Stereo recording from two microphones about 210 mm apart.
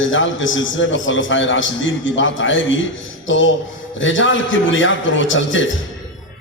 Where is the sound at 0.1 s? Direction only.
65° left (ahead or behind).